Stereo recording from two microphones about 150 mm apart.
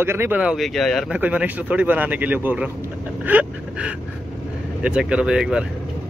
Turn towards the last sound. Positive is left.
turn(degrees=-5)  # may be behind; listen again after turning